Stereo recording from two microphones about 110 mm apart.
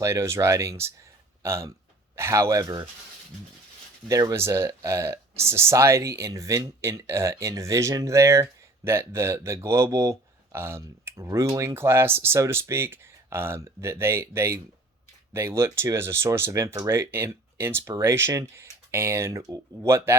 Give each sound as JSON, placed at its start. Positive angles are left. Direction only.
{"t": 0.0, "sound": "speech", "side_deg": -25}
{"t": 4.1, "sound": "speech", "side_deg": -30}